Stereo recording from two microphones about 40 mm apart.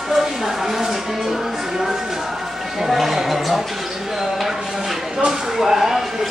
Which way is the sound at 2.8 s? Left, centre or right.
Centre.